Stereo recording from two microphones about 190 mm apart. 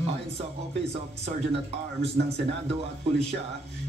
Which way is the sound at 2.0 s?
35° right (ahead or behind).